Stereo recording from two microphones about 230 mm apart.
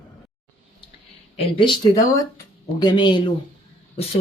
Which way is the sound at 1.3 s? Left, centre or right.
Left.